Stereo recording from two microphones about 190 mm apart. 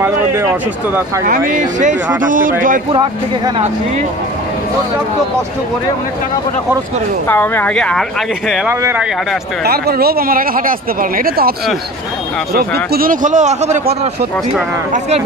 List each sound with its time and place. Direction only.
0.0 s speech: 15° right (ahead or behind)
1.5 s speech: 40° right (ahead or behind)
2.9 s speech: 25° right (ahead or behind)
7.2 s speech: 10° left (ahead or behind)
8.6 s speech: 10° right (ahead or behind)
9.7 s speech: 55° right (ahead or behind)
12.5 s speech: 55° right (ahead or behind); by 13.7 s 40° right (ahead or behind)